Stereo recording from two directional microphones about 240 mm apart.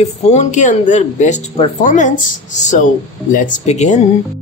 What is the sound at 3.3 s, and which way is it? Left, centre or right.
Speech, left.